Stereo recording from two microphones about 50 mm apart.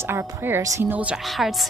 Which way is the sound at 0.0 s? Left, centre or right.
Right.